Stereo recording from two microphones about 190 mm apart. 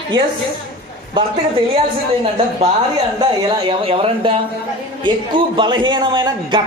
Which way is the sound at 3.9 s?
30° right (ahead or behind).